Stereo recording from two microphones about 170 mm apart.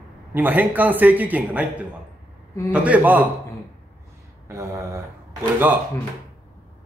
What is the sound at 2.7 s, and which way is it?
Speech, 10° right (ahead or behind).